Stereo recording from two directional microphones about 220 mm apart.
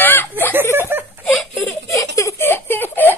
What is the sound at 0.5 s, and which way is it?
Speech, 10° right (ahead or behind).